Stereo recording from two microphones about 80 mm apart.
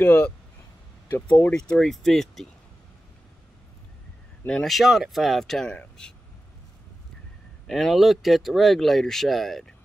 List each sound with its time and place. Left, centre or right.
0.0 s speech: centre
1.5 s speech: centre
4.5 s speech: centre
7.6 s speech: centre